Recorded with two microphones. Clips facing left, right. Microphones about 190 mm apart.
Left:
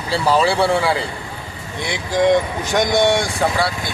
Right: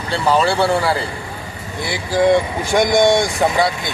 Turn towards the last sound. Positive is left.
turn(degrees=-15)  # may be behind; listen again after turning